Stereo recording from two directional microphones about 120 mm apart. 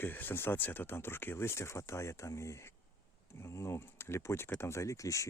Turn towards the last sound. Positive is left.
turn(degrees=25)  # may be behind; listen again after turning